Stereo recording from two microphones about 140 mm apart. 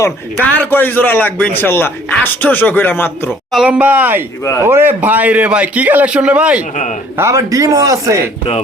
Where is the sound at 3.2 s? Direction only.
5° right (ahead or behind).